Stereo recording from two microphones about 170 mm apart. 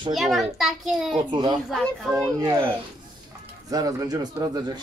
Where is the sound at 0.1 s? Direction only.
Centre (ahead or behind).